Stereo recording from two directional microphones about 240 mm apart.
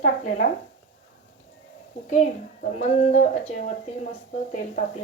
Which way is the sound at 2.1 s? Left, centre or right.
Left.